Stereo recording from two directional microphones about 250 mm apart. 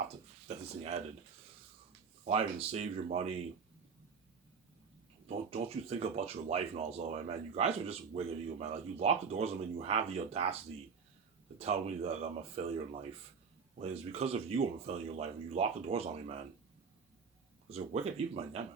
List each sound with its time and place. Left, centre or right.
0.4 s speech: right
2.2 s speech: right
5.2 s speech: right
11.6 s speech: right
17.7 s speech: right